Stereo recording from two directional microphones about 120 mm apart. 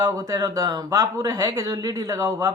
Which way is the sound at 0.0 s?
25° right (ahead or behind).